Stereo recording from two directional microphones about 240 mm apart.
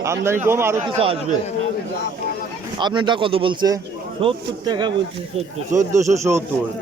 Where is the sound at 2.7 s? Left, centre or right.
Centre.